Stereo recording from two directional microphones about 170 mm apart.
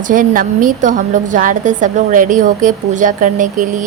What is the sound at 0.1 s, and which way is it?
A woman's voice, 50° right (ahead or behind).